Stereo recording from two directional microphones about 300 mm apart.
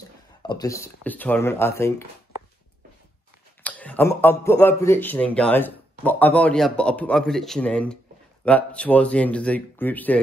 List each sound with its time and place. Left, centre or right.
0.4 s speech: centre
3.6 s speech: centre